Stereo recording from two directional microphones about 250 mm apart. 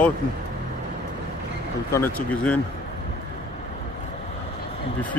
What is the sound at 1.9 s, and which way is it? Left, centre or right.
Speech, centre.